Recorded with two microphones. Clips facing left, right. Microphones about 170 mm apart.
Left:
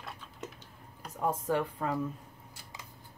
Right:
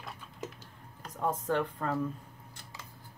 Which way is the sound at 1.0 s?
10° left (ahead or behind).